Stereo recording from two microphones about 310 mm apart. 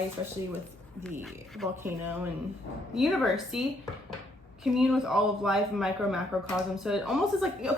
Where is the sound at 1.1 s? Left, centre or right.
Centre.